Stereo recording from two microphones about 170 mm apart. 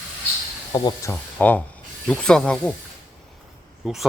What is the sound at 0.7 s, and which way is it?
Speech, 25° left (ahead or behind).